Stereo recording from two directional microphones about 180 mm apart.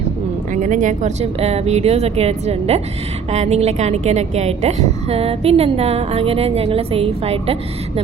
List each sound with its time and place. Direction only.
0.5 s a woman's voice: 45° right (ahead or behind)